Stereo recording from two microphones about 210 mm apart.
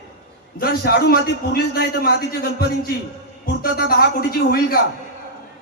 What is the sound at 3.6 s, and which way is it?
A man's voice, 45° left (ahead or behind).